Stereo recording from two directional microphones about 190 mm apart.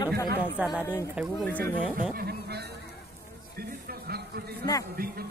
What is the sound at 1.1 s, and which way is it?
Speech, 5° left (ahead or behind).